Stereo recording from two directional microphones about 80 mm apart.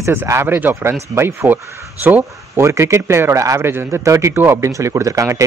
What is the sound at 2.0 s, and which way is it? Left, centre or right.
Speech, right.